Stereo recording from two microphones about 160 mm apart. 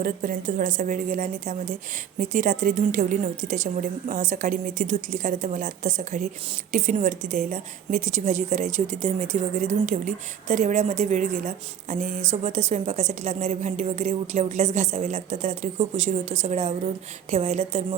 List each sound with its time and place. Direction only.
0.0 s a woman's voice: 60° right (ahead or behind); by 17.8 s 40° right (ahead or behind)